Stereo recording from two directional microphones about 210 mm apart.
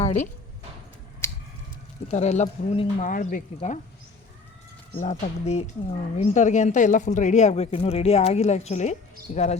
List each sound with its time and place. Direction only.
1.2 s a sound: 10° left (ahead or behind)
2.0 s speech: 30° left (ahead or behind)
4.9 s speech: 35° left (ahead or behind)